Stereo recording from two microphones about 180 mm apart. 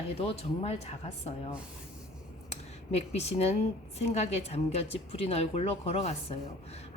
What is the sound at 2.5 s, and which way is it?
Speech, 35° left (ahead or behind).